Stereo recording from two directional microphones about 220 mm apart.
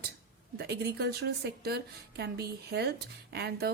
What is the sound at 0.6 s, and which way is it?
A woman's voice, 45° right (ahead or behind).